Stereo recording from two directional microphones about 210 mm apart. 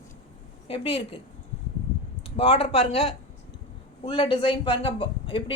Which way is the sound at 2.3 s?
25° left (ahead or behind).